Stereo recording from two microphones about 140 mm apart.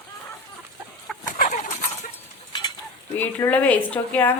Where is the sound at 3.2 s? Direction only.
10° left (ahead or behind).